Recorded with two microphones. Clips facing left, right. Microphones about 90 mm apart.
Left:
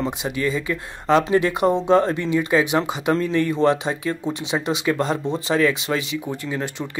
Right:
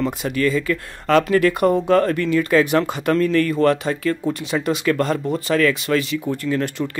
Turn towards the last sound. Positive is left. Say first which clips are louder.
# right 5 dB
turn(degrees=15)  # may be behind; listen again after turning